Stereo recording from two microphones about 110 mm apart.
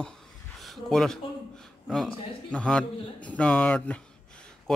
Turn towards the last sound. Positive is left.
turn(degrees=15)  # may be behind; listen again after turning